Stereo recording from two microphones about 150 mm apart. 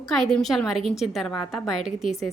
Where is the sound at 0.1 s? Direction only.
Centre (ahead or behind).